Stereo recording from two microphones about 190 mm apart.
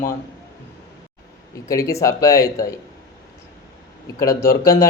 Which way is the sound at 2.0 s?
15° left (ahead or behind).